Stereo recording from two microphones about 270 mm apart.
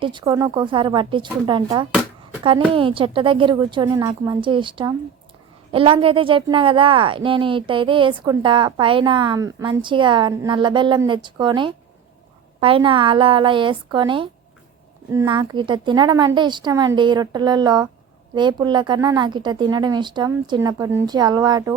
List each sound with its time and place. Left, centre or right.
0.0 s a woman's voice: centre